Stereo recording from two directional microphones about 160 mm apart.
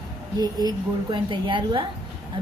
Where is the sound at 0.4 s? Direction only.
25° right (ahead or behind).